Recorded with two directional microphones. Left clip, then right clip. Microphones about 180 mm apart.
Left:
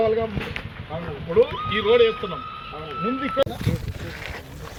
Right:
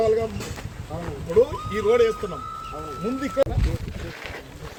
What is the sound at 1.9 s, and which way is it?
Speech, 15° right (ahead or behind).